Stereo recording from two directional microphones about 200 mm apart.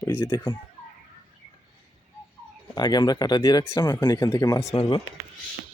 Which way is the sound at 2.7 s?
20° left (ahead or behind).